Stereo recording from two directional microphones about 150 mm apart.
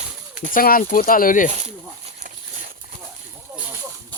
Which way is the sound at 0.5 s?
70° left (ahead or behind).